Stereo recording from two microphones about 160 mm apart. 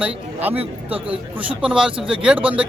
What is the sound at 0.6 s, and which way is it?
Speech, 35° right (ahead or behind).